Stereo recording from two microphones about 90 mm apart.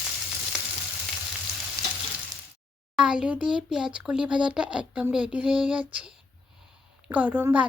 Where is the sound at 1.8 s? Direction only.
35° right (ahead or behind).